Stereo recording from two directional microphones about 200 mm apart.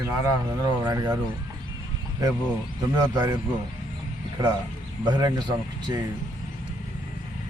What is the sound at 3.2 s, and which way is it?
Speech, 20° right (ahead or behind).